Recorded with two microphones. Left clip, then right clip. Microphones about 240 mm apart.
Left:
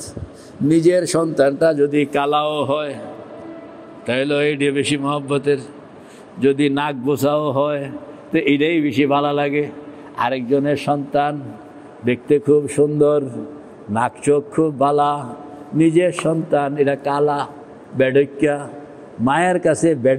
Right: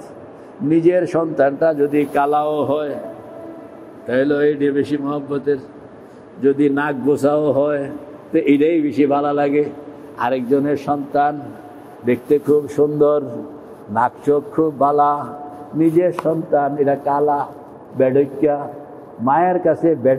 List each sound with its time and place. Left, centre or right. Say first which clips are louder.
0.7 s a man's voice: even; left
4.1 s a man's voice: right 2 dB; left
14.5 s a man's voice: right 1 dB; left
15.0 s a man's voice: right 2 dB; left